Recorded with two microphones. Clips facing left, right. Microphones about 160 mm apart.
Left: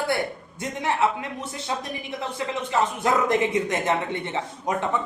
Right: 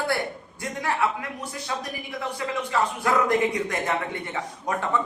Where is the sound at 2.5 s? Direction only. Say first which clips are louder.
Left 1 dB; 20° left (ahead or behind).